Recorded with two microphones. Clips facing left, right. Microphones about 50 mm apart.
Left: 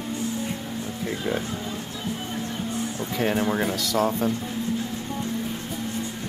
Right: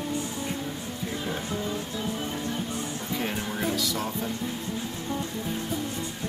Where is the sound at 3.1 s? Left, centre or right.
Left.